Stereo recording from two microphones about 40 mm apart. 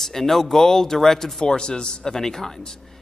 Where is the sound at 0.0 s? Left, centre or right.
Centre.